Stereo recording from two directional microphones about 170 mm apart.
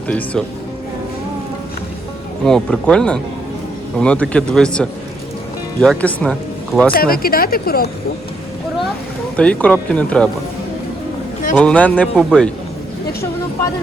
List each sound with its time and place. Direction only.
0.1 s speech: 5° left (ahead or behind)
2.4 s a man's voice: 5° left (ahead or behind)
6.9 s speech: 60° left (ahead or behind)
9.3 s speech: 10° left (ahead or behind)
11.5 s speech: 10° left (ahead or behind)